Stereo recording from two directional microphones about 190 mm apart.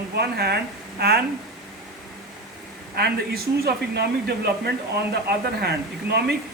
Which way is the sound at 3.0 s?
55° right (ahead or behind).